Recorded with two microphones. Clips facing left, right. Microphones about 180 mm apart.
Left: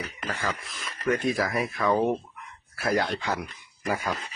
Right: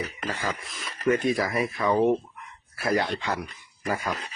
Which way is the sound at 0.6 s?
Centre (ahead or behind).